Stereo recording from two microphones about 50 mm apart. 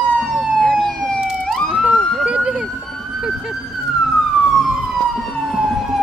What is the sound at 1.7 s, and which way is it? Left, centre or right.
Police car, right.